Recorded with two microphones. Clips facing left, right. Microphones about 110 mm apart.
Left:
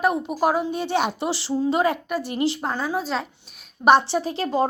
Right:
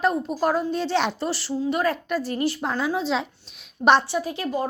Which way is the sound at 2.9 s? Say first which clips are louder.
Right 1 dB; centre (ahead or behind).